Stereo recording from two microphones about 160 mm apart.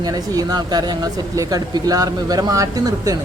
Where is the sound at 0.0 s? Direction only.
25° right (ahead or behind).